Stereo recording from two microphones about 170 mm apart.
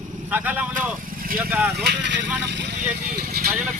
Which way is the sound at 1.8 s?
90° right.